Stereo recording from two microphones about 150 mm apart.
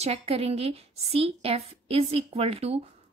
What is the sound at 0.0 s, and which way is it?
A woman's voice, 45° right (ahead or behind).